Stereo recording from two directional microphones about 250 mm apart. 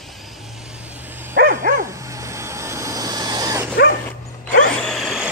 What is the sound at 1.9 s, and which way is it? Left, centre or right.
Vehicle, centre.